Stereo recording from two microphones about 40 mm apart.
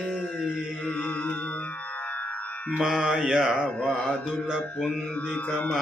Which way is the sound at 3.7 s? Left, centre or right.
Left.